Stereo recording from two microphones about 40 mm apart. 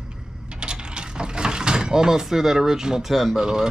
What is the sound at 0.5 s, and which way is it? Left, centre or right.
Mechanisms, right.